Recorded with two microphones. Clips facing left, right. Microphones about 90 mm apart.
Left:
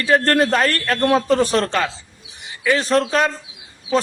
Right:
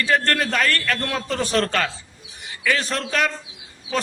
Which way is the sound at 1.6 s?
20° left (ahead or behind).